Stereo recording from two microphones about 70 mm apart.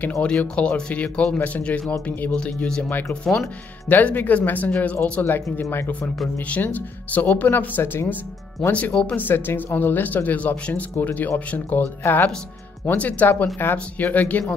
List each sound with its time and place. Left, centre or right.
0.2 s speech: centre
3.9 s speech: left
5.2 s speech: left
8.7 s speech: centre
9.3 s speech: left
9.8 s speech: left